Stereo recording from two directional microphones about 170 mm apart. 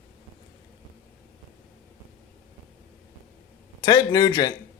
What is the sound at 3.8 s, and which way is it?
Speech, 25° left (ahead or behind).